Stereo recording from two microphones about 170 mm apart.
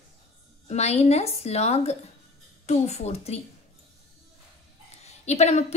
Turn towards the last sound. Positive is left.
turn(degrees=40)  # may be behind; listen again after turning